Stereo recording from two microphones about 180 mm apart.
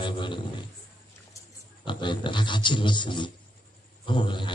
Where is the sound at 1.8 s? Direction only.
25° left (ahead or behind).